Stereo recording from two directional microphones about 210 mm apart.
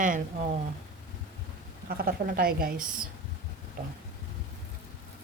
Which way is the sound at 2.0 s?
45° right (ahead or behind).